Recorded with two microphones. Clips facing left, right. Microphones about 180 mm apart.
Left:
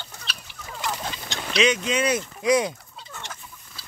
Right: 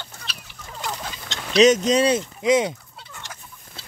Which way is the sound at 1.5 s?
40° right (ahead or behind).